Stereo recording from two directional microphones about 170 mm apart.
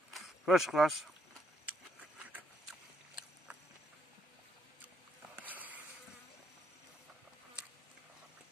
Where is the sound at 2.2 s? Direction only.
10° right (ahead or behind).